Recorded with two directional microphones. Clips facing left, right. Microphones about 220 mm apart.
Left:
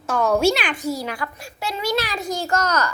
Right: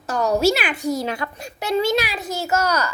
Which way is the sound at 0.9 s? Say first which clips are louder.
Right 5 dB; 25° right (ahead or behind).